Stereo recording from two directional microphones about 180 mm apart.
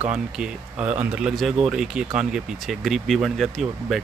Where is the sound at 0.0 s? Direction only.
5° right (ahead or behind).